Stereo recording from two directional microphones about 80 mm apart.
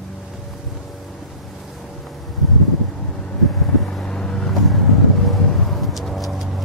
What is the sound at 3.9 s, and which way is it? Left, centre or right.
Vehicle, centre.